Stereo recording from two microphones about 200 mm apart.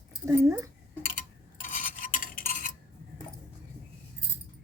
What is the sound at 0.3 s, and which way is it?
Speech, 15° right (ahead or behind).